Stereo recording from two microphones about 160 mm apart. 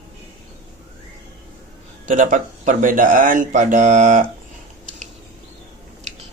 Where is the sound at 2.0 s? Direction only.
50° right (ahead or behind).